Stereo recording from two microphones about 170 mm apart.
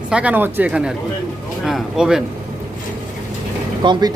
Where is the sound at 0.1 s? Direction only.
5° right (ahead or behind).